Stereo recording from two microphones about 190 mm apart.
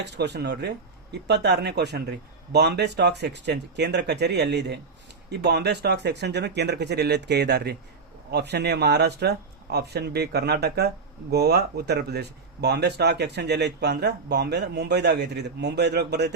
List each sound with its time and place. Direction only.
0.0 s speech: 65° right (ahead or behind)